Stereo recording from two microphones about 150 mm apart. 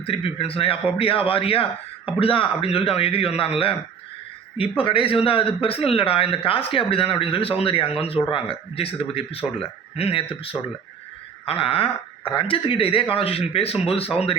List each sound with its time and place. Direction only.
0.0 s speech: 40° left (ahead or behind)
4.8 s speech: 35° left (ahead or behind)